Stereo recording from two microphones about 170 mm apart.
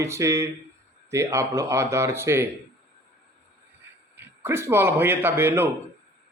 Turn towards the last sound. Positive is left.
turn(degrees=-15)  # may be behind; listen again after turning